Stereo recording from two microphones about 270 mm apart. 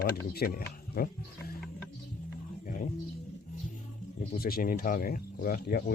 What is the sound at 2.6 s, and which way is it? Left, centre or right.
Music, left.